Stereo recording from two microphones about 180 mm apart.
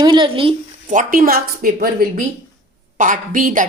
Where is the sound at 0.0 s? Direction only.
25° right (ahead or behind).